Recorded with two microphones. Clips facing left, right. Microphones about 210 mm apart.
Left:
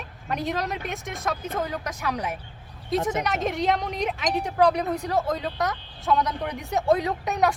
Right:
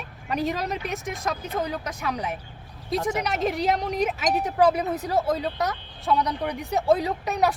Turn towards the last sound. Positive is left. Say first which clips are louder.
# even
turn(degrees=0)  # may be behind; listen again after turning